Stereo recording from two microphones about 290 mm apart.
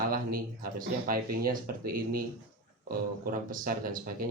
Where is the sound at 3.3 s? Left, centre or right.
Right.